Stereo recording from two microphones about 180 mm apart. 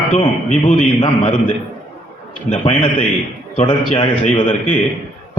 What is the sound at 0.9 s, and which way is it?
Speech, 25° left (ahead or behind).